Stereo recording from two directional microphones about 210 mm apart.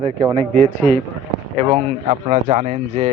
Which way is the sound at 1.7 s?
30° right (ahead or behind).